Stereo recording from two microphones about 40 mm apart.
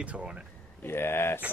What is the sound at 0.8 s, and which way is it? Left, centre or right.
Speech, left.